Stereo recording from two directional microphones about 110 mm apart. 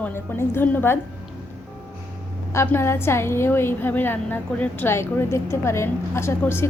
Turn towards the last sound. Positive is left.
turn(degrees=20)  # may be behind; listen again after turning